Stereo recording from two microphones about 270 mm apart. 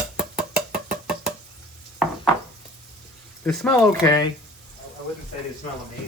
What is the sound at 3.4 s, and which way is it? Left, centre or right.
Speech, centre.